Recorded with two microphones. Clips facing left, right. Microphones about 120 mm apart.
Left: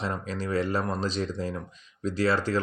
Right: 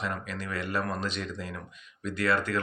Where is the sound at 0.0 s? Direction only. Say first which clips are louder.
Left 3 dB; 30° left (ahead or behind).